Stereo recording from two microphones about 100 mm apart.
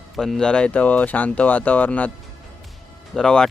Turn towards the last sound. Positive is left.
turn(degrees=5)  # may be behind; listen again after turning